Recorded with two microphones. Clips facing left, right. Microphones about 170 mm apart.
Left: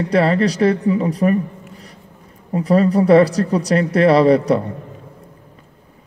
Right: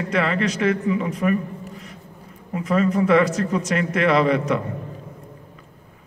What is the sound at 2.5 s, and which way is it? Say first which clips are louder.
Speech: left 5 dB; 35° left (ahead or behind).